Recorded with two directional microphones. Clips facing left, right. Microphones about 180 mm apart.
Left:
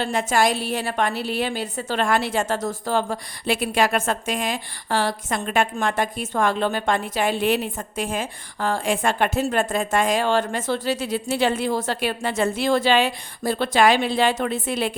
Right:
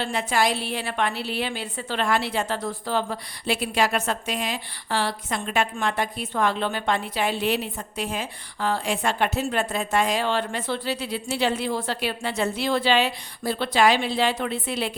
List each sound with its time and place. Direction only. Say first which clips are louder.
0.0 s a woman's voice: left 3 dB; 45° left (ahead or behind)